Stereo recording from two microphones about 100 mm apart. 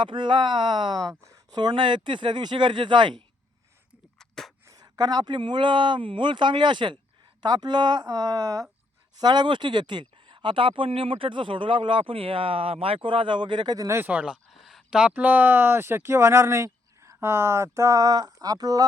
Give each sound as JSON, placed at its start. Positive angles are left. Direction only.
{"t": 0.0, "sound": "speech", "side_deg": -50}
{"t": 4.2, "sound": "a sound", "side_deg": 5}
{"t": 4.7, "sound": "speech", "side_deg": -40}
{"t": 9.2, "sound": "speech", "side_deg": -45}
{"t": 13.7, "sound": "speech", "side_deg": -30}
{"t": 14.1, "sound": "speech", "side_deg": -15}
{"t": 14.5, "sound": "speech", "side_deg": 0}